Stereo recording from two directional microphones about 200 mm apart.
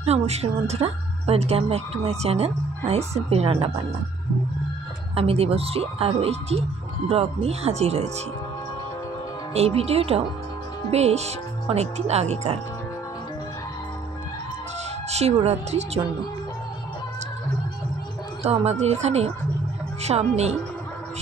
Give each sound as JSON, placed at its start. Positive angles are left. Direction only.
{"t": 0.0, "sound": "a woman's voice", "side_deg": -30}
{"t": 5.1, "sound": "a woman's voice", "side_deg": -30}
{"t": 9.5, "sound": "a woman's voice", "side_deg": -30}
{"t": 15.0, "sound": "a woman's voice", "side_deg": -30}
{"t": 18.4, "sound": "a woman's voice", "side_deg": -30}